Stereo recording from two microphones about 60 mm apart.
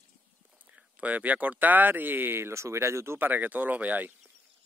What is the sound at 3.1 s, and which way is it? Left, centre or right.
Speech, right.